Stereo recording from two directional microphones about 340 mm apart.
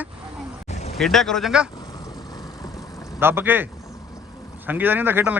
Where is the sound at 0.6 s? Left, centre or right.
Centre.